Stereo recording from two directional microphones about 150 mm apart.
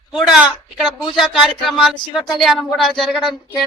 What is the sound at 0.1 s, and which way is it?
A woman's voice, centre (ahead or behind).